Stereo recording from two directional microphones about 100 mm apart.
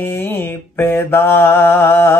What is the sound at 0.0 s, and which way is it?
Mantra, 20° left (ahead or behind).